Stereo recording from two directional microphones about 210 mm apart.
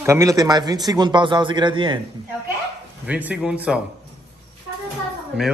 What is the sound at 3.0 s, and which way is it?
Speech, 5° right (ahead or behind).